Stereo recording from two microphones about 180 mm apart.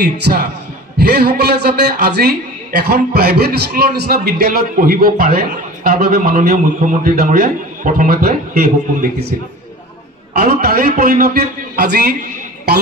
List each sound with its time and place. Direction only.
0.0 s a man's voice: 60° right (ahead or behind)
10.3 s a man's voice: 60° right (ahead or behind)